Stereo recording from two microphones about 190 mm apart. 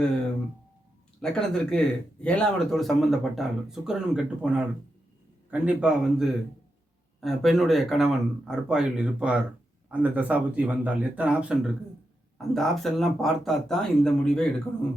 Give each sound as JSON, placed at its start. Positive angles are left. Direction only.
{"t": 1.2, "sound": "speech", "side_deg": 5}